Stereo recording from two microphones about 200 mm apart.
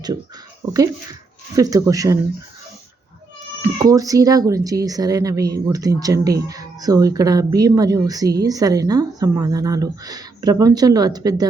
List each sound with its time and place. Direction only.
1.5 s speech: 15° right (ahead or behind)
3.6 s speech: 20° right (ahead or behind)